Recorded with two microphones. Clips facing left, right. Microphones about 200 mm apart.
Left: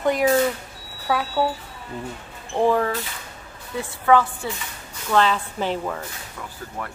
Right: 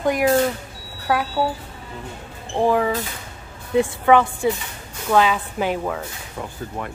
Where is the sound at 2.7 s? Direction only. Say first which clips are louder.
Right 2 dB; 10° right (ahead or behind).